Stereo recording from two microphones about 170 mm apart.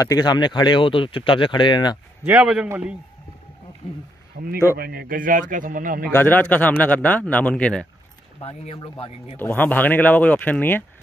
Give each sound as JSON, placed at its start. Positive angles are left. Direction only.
{"t": 0.0, "sound": "speech", "side_deg": 20}
{"t": 2.2, "sound": "a man's voice", "side_deg": -5}
{"t": 4.4, "sound": "a man's voice", "side_deg": -55}
{"t": 6.1, "sound": "speech", "side_deg": 10}
{"t": 8.4, "sound": "speech", "side_deg": 35}
{"t": 9.4, "sound": "speech", "side_deg": 10}